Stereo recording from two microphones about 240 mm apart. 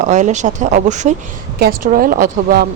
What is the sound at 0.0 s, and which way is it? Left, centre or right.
A woman's voice, right.